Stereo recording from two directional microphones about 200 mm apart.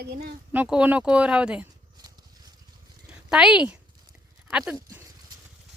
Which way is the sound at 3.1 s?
5° right (ahead or behind).